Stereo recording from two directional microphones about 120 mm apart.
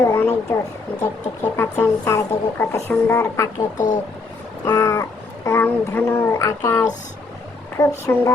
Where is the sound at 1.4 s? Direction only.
20° left (ahead or behind).